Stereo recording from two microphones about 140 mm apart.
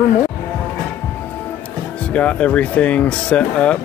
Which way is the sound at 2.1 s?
10° left (ahead or behind).